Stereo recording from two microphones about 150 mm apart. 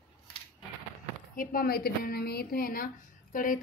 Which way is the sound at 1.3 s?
80° left.